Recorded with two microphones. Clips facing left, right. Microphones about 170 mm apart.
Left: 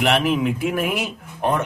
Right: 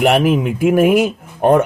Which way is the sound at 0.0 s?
45° right (ahead or behind).